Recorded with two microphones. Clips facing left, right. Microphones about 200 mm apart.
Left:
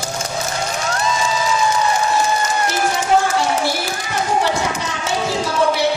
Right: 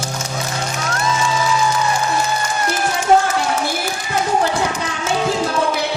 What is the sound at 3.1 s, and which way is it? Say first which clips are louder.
Run: right 3 dB; 45° right (ahead or behind).